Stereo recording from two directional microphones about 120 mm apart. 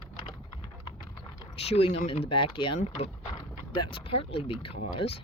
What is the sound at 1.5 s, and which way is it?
Speech, 55° left (ahead or behind).